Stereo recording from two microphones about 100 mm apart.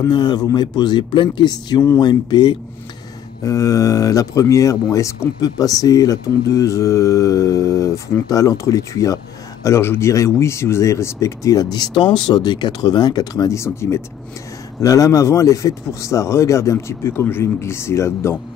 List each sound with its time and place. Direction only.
0.1 s speech: 50° left (ahead or behind)
3.4 s speech: 35° left (ahead or behind)